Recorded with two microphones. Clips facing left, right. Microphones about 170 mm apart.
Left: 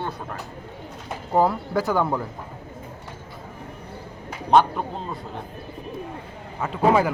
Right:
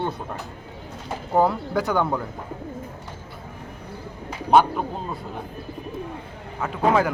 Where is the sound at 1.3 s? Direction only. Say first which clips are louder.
Even; centre (ahead or behind).